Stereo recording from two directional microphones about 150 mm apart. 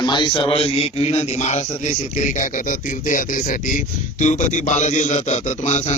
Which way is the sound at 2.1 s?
55° left (ahead or behind).